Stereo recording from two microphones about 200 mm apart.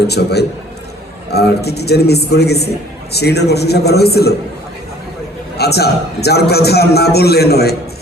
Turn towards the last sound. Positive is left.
turn(degrees=50)  # may be behind; listen again after turning